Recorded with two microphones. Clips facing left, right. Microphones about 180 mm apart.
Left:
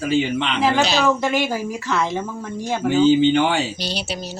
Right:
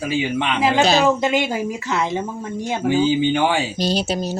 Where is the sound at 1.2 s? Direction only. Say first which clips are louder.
Right 1 dB; 20° right (ahead or behind).